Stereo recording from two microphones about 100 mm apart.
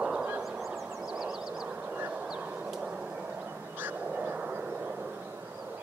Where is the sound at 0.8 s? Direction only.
5° right (ahead or behind).